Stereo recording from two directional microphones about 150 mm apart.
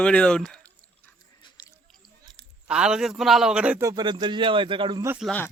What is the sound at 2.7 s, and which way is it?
A man's voice, 5° right (ahead or behind).